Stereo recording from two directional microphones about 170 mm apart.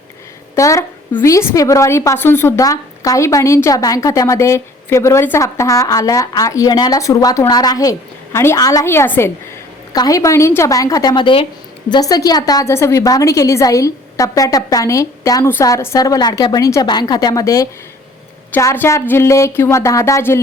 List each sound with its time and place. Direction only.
0.5 s a woman's voice: 20° left (ahead or behind)